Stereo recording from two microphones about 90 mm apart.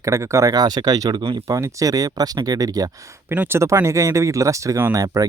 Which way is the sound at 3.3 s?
20° right (ahead or behind).